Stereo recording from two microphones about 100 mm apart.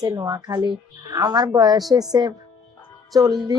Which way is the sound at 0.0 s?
35° right (ahead or behind).